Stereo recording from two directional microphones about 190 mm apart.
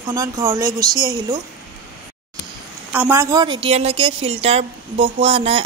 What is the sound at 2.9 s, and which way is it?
A woman's voice, 10° right (ahead or behind).